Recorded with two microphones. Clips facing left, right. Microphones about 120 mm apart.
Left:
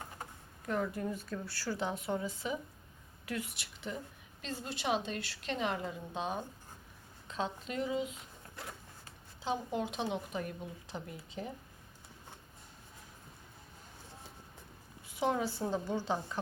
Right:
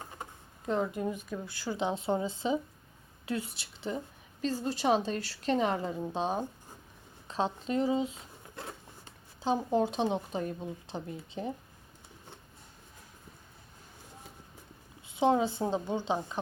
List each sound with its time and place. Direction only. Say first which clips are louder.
0.2 s a woman's voice: right 2 dB; 20° right (ahead or behind)
15.0 s a woman's voice: right 6 dB; 25° right (ahead or behind)